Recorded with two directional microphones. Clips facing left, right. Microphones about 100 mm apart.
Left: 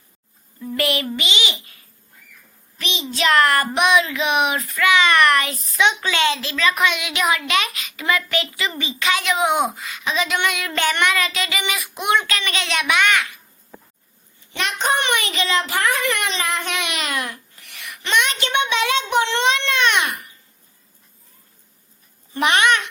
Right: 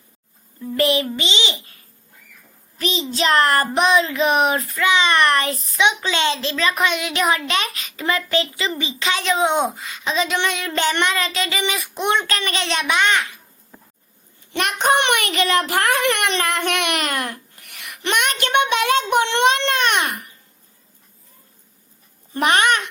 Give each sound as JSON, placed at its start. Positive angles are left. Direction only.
{"t": 0.8, "sound": "a child's voice", "side_deg": -25}
{"t": 2.7, "sound": "child singing", "side_deg": -35}
{"t": 4.8, "sound": "a child's voice", "side_deg": -25}
{"t": 5.7, "sound": "a child's voice", "side_deg": -20}
{"t": 14.5, "sound": "a child's voice", "side_deg": -50}
{"t": 17.8, "sound": "child singing", "side_deg": -50}
{"t": 22.4, "sound": "child singing", "side_deg": -45}